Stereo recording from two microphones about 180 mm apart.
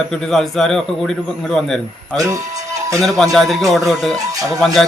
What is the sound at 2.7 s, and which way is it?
Music, 15° right (ahead or behind).